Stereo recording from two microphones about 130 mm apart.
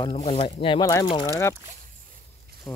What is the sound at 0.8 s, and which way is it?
Speech, 25° left (ahead or behind).